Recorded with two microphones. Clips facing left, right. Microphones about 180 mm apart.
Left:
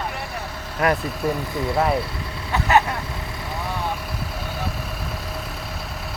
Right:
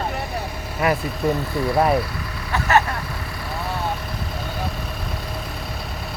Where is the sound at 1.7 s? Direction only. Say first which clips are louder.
Right 3 dB; 25° right (ahead or behind).